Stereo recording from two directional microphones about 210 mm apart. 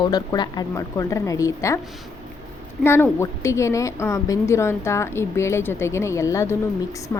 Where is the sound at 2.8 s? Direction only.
10° left (ahead or behind).